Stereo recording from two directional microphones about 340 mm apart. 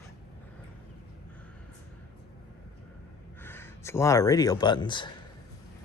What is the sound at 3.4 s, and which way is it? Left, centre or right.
Speech, centre.